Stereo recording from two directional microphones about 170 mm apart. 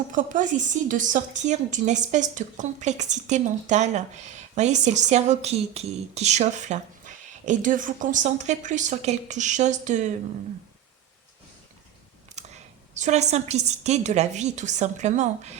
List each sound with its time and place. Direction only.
0.1 s a woman's voice: 50° right (ahead or behind)
12.4 s a woman's voice: 45° right (ahead or behind)